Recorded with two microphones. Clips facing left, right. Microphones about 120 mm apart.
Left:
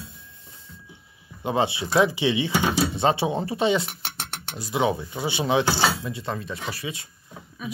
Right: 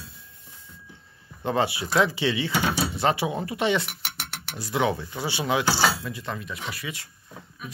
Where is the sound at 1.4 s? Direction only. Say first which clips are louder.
Left 1 dB; 20° left (ahead or behind).